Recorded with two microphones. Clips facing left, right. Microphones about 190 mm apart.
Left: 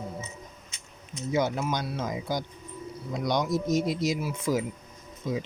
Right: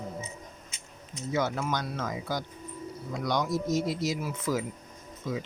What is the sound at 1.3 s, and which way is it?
Speech, 15° left (ahead or behind).